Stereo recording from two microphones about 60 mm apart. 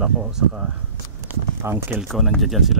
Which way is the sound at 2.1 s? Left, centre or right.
Centre.